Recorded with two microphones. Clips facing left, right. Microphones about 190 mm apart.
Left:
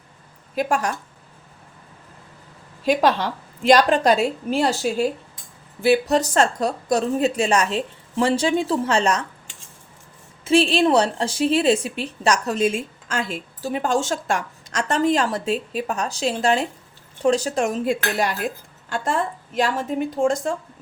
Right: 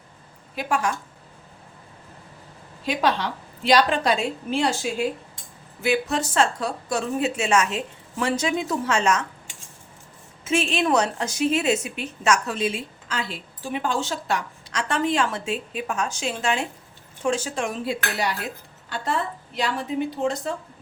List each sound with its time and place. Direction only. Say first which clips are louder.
0.5 s a woman's voice: left 3 dB; 40° left (ahead or behind)
2.8 s a woman's voice: left 5 dB; 45° left (ahead or behind)
10.4 s a woman's voice: left 6 dB; 35° left (ahead or behind)